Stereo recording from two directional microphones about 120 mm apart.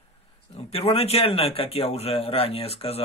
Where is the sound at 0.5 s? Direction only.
55° left (ahead or behind).